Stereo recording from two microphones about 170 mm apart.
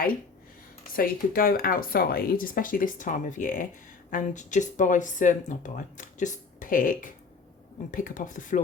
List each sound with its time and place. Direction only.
0.9 s speech: 60° left (ahead or behind)